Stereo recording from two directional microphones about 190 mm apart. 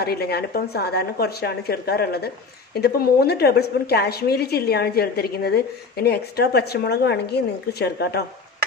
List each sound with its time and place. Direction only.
0.0 s a woman's voice: 55° left (ahead or behind)